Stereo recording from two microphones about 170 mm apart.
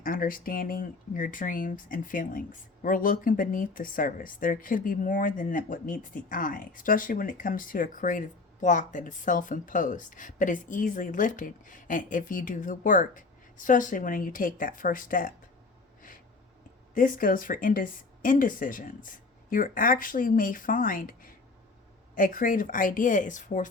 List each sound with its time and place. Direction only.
0.0 s speech: 55° left (ahead or behind)
16.9 s speech: 55° left (ahead or behind)